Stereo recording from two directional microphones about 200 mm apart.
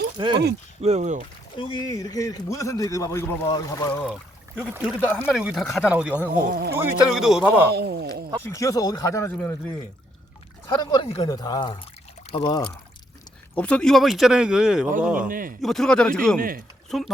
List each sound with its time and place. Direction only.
0.2 s speech: 25° right (ahead or behind)
0.8 s speech: 35° right (ahead or behind)
1.5 s a man's voice: 20° left (ahead or behind)
4.0 s a sound: centre (ahead or behind)
4.7 s speech: 5° right (ahead or behind)
6.3 s speech: 50° right (ahead or behind)
6.7 s speech: 5° right (ahead or behind)
7.7 s speech: 55° right (ahead or behind)
8.4 s a man's voice: 15° left (ahead or behind)
10.8 s speech: 25° left (ahead or behind)
13.6 s speech: 5° left (ahead or behind)
15.3 s speech: 45° right (ahead or behind)
15.6 s speech: centre (ahead or behind)